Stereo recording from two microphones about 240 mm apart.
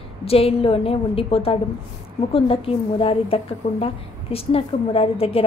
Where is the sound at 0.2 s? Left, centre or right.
Left.